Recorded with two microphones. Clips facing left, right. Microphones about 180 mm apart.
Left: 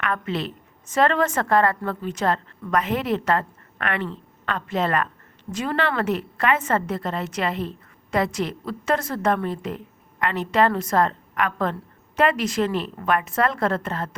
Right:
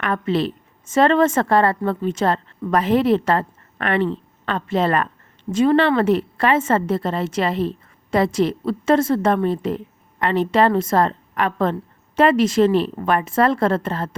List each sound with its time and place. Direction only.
0.0 s a woman's voice: 35° right (ahead or behind)